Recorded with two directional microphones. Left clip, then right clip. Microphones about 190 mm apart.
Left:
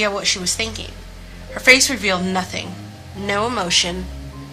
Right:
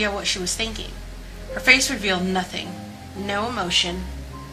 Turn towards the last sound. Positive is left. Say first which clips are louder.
# left 4 dB
turn(degrees=35)  # may be behind; listen again after turning